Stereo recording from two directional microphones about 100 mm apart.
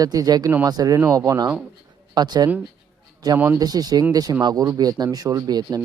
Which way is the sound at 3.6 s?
40° right (ahead or behind).